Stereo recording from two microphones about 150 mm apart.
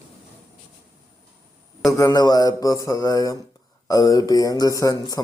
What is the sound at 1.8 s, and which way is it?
Mantra, 20° left (ahead or behind).